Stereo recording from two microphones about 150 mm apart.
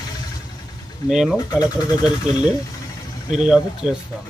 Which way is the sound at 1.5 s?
25° left (ahead or behind).